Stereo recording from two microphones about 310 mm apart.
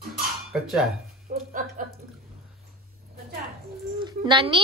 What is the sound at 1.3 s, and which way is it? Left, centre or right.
Speech, right.